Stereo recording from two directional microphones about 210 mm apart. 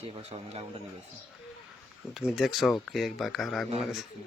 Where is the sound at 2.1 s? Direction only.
Centre (ahead or behind).